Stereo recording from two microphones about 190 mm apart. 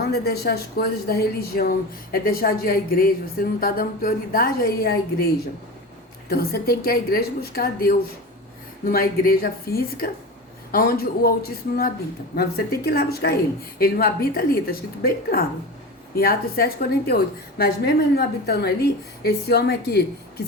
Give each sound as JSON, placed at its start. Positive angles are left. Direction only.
{"t": 0.1, "sound": "a woman's voice", "side_deg": 55}